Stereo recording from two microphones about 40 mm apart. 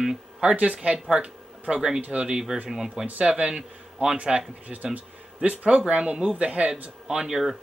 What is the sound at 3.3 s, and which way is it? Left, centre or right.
Speech, right.